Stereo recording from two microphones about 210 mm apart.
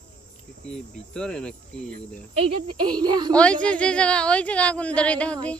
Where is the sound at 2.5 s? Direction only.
20° right (ahead or behind).